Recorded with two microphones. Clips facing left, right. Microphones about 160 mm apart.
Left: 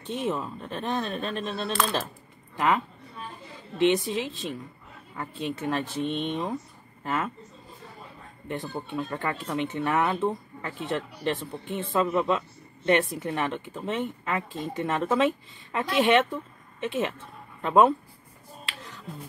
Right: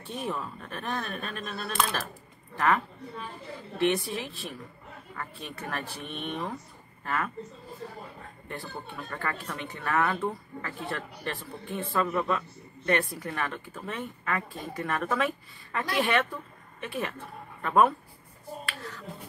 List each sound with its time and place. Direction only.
0.0 s a man's voice: 20° left (ahead or behind)
8.5 s speech: 20° left (ahead or behind)
18.7 s finger snapping: 15° left (ahead or behind)